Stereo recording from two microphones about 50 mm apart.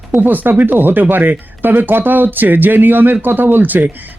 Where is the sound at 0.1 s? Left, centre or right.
Right.